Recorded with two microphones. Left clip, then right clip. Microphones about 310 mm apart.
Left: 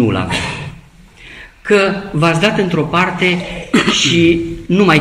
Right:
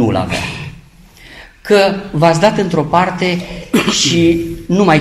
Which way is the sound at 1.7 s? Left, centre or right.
Right.